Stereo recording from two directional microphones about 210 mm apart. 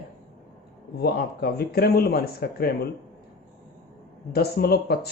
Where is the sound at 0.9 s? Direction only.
50° left (ahead or behind).